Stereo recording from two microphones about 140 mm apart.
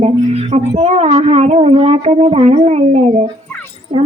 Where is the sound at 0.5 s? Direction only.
50° right (ahead or behind).